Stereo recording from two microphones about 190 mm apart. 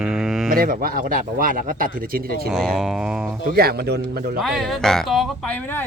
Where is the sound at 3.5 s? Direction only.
55° right (ahead or behind).